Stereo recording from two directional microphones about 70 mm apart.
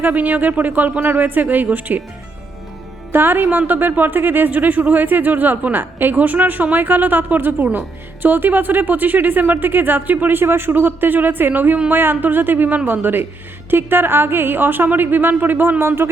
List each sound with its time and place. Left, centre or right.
0.0 s speech: right
3.1 s speech: right